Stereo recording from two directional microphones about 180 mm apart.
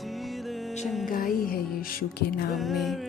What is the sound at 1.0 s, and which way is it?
Speech, 50° left (ahead or behind).